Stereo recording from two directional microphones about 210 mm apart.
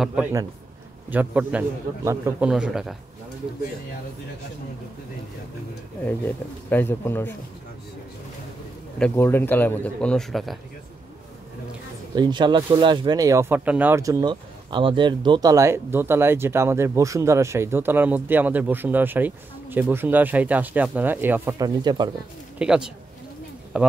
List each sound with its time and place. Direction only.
0.0 s a man's voice: 5° right (ahead or behind)
6.0 s speech: 10° left (ahead or behind)
8.9 s a man's voice: 10° left (ahead or behind)
12.2 s speech: 20° right (ahead or behind)
22.6 s a man's voice: 5° right (ahead or behind)